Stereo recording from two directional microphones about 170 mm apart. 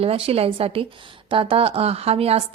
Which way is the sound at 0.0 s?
35° right (ahead or behind).